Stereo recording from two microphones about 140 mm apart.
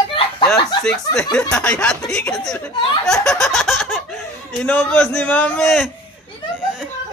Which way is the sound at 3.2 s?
5° left (ahead or behind).